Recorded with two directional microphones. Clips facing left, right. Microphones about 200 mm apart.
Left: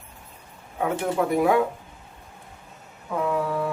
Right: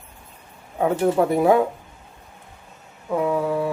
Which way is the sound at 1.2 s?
40° right (ahead or behind).